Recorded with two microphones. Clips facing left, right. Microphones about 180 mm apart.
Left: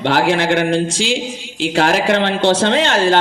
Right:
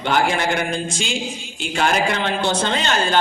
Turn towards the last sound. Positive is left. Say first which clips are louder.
# left 7 dB
turn(degrees=75)  # may be behind; listen again after turning